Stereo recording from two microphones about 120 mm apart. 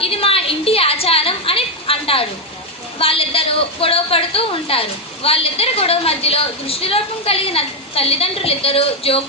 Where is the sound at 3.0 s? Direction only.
50° left (ahead or behind).